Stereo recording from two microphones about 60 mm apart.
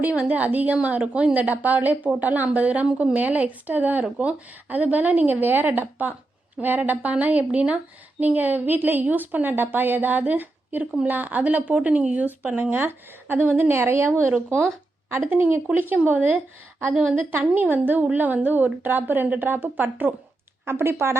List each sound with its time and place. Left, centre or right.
0.0 s a woman's voice: right
15.1 s a woman's voice: right
16.9 s a woman's voice: centre
17.5 s a woman's voice: right
20.7 s speech: right